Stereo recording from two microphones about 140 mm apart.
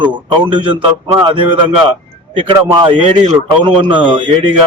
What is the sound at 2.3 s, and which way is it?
A man's voice, 35° right (ahead or behind).